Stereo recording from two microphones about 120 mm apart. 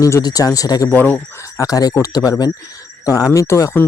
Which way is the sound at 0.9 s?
15° left (ahead or behind).